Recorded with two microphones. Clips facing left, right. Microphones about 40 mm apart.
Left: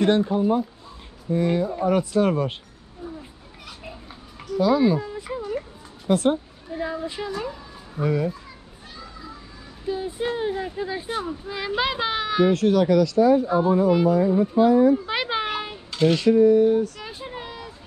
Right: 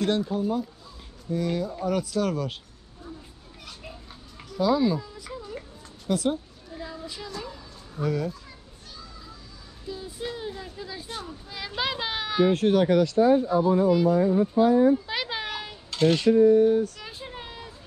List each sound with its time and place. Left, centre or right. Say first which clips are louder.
0.0 s speech: left 6 dB; left
4.4 s a sound: left 4 dB; centre
4.8 s a sound: left 5 dB; left
6.0 s speech: left 5 dB; left
8.9 s children playing: left 5 dB; left
9.8 s speech: left 8 dB; left; by 12.5 s centre
12.5 s speech: left 2 dB; right
13.5 s speech: left 2 dB; left
14.1 s speech: left 2 dB; left
14.6 s speech: left 3 dB; left
15.0 s children playing: left 6 dB; left
15.9 s a sound: left 2 dB; centre
16.3 s speech: left 2 dB; left
17.0 s a sound: left 4 dB; centre